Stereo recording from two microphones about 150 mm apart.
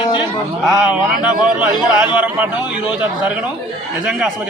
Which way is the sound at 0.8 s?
10° right (ahead or behind).